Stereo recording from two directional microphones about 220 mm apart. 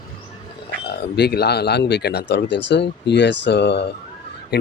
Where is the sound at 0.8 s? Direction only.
50° left (ahead or behind).